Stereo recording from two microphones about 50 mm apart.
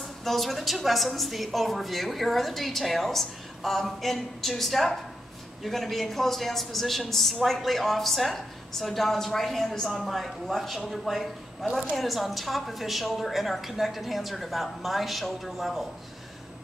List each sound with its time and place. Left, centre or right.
0.2 s a woman's voice: centre